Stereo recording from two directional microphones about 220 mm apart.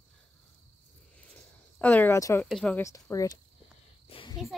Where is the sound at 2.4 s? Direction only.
5° left (ahead or behind).